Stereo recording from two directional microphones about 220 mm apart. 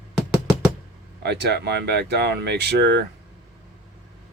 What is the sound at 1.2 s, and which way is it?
Speech, 50° right (ahead or behind).